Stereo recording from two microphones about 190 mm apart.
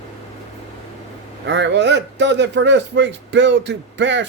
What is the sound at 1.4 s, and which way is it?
A man's voice, 70° right (ahead or behind).